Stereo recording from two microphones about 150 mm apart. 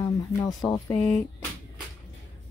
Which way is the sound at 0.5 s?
25° left (ahead or behind).